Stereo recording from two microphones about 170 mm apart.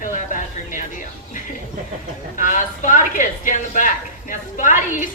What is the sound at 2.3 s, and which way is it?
Speech, 50° left (ahead or behind).